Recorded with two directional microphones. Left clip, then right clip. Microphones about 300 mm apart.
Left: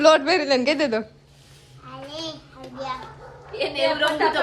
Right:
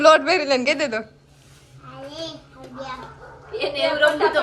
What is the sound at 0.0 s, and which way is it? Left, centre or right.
A woman's voice, centre.